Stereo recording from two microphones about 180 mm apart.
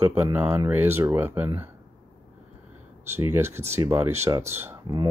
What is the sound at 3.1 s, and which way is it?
Speech, 10° right (ahead or behind).